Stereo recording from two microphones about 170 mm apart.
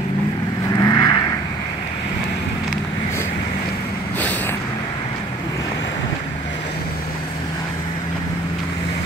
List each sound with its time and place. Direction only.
0.7 s vehicle: 20° left (ahead or behind)